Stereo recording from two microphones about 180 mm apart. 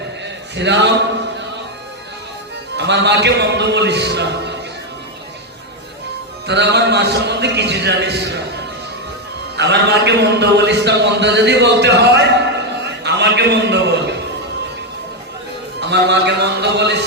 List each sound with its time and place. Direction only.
0.5 s a man's voice: 75° right (ahead or behind)
2.7 s a man's voice: 75° right (ahead or behind)
6.5 s a man's voice: 70° right (ahead or behind)
9.6 s a man's voice: 70° right (ahead or behind)
15.8 s a man's voice: 70° right (ahead or behind)